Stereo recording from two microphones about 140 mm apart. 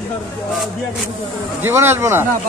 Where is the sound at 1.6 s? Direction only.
15° right (ahead or behind).